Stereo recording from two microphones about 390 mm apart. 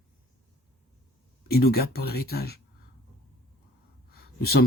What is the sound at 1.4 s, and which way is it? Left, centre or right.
Speech, left.